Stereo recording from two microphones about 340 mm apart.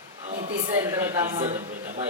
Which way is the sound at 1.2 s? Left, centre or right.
Centre.